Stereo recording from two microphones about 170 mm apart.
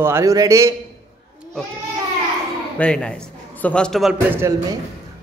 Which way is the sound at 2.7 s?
5° left (ahead or behind).